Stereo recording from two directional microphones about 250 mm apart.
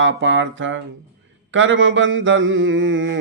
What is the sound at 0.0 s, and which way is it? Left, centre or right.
Speech, right.